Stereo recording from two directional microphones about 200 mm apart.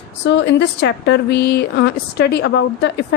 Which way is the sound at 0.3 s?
60° left (ahead or behind).